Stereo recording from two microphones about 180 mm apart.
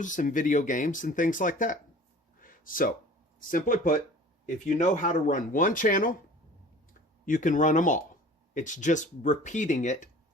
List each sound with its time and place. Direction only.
0.0 s speech: 45° left (ahead or behind)
2.4 s a sound: 50° left (ahead or behind)
3.5 s speech: 45° left (ahead or behind)
7.3 s speech: 45° left (ahead or behind)